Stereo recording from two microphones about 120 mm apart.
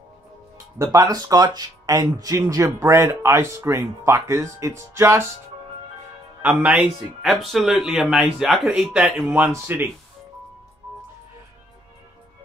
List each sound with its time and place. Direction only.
0.7 s speech: 30° right (ahead or behind)
6.4 s speech: 10° right (ahead or behind)
9.3 s speech: 20° right (ahead or behind)